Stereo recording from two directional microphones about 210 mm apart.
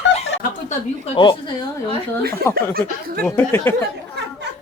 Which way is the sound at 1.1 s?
20° left (ahead or behind).